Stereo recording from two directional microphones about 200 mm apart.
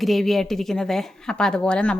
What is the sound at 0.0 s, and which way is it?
Speech, centre (ahead or behind).